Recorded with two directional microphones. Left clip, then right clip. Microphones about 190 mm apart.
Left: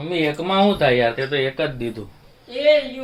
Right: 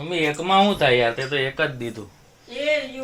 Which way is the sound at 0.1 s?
10° left (ahead or behind).